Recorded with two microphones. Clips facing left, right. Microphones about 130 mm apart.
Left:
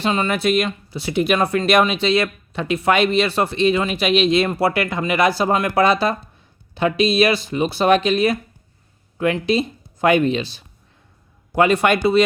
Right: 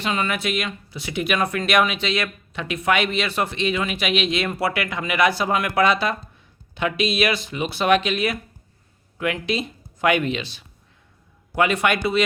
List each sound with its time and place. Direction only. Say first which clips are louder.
0.0 s speech: left 5 dB; 30° left (ahead or behind)